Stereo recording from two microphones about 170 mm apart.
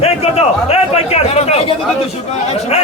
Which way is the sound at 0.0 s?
40° left (ahead or behind).